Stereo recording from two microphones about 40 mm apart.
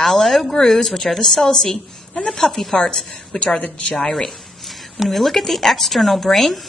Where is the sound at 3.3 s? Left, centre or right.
Left.